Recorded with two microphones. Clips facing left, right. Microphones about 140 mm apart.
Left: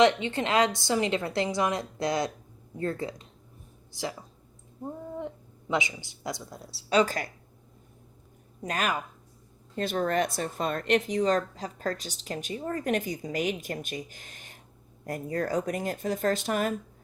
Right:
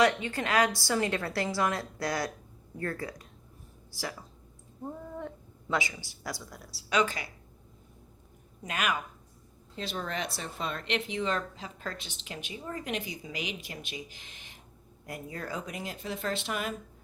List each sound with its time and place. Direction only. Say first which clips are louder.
0.0 s a woman's voice: left 4 dB; 25° left (ahead or behind)
7.0 s speech: left 3 dB; 40° left (ahead or behind)
8.6 s a woman's voice: left 2 dB; 35° left (ahead or behind)
9.7 s speech: left 9 dB; 50° left (ahead or behind)